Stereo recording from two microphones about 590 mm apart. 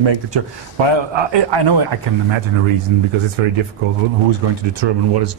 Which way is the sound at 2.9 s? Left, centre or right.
Right.